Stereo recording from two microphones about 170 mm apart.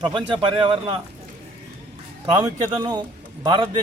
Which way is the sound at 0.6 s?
30° right (ahead or behind).